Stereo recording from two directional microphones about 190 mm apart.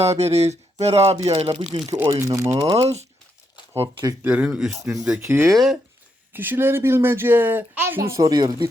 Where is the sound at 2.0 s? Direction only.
20° right (ahead or behind).